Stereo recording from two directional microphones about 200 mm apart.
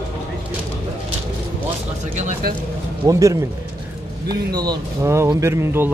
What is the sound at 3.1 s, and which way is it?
Speech, 15° right (ahead or behind).